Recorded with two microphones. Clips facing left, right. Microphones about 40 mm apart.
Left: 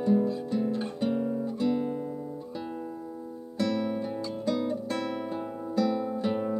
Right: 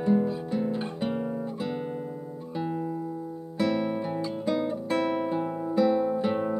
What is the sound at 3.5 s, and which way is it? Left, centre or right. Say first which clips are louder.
Music: right 2 dB; centre.